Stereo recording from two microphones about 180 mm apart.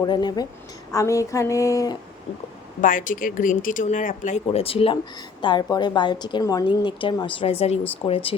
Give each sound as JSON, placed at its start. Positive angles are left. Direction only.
{"t": 0.0, "sound": "a woman's voice", "side_deg": 25}
{"t": 2.8, "sound": "a woman's voice", "side_deg": 50}